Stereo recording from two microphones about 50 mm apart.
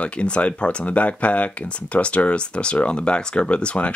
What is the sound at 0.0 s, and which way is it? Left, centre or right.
Speech, left.